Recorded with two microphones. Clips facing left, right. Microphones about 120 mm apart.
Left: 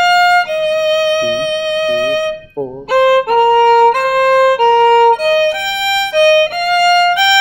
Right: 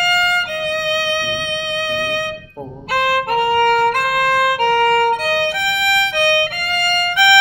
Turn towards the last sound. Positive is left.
turn(degrees=20)  # may be behind; listen again after turning